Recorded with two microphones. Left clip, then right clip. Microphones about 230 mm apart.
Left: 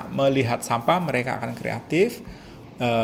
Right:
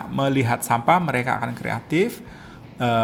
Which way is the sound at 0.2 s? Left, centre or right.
Right.